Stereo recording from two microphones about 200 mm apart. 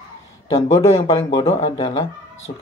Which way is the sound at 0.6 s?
30° left (ahead or behind).